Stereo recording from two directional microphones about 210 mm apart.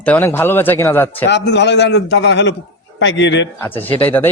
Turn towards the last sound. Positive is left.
turn(degrees=10)  # may be behind; listen again after turning